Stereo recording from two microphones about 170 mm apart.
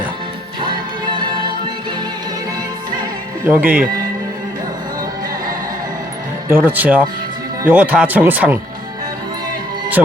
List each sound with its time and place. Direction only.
3.4 s speech: 10° right (ahead or behind)
6.5 s speech: 10° right (ahead or behind)